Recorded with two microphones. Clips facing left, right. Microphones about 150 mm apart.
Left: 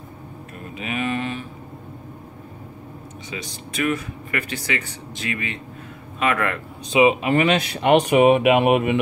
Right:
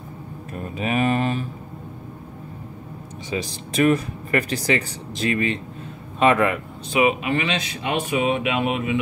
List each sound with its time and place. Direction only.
0.7 s speech: 40° right (ahead or behind)
3.3 s speech: 35° right (ahead or behind)
6.9 s speech: 25° left (ahead or behind)
7.2 s speech: 50° left (ahead or behind); by 9.0 s 65° left (ahead or behind)